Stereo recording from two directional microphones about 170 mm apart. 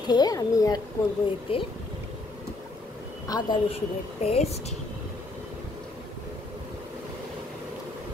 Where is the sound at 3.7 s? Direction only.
40° left (ahead or behind).